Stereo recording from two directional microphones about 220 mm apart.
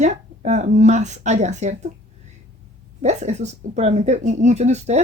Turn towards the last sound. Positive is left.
turn(degrees=-30)  # may be behind; listen again after turning